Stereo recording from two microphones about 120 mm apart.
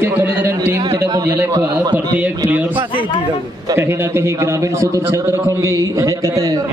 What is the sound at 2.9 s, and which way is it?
Speech, 45° left (ahead or behind).